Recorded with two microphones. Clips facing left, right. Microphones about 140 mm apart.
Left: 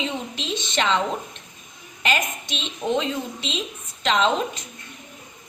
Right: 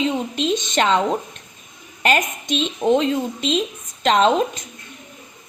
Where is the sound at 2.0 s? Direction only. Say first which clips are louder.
Right 5 dB; 45° right (ahead or behind).